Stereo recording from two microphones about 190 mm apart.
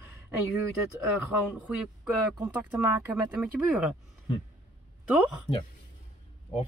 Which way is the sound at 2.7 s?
5° right (ahead or behind).